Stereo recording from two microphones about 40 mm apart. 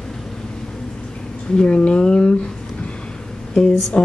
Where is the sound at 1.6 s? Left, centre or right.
Left.